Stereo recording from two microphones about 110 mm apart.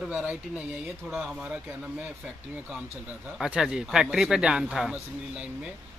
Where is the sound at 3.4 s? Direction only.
5° right (ahead or behind).